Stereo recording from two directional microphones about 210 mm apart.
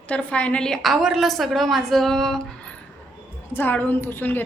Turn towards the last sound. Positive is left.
turn(degrees=10)  # may be behind; listen again after turning